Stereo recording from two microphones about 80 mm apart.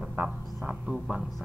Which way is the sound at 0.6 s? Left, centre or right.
Centre.